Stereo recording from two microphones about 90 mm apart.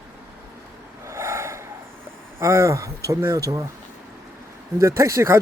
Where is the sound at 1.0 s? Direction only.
30° right (ahead or behind).